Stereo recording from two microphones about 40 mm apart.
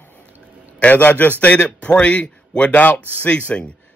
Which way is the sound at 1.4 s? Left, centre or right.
Left.